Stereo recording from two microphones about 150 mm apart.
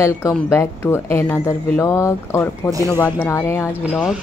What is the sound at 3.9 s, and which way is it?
Speech, centre (ahead or behind).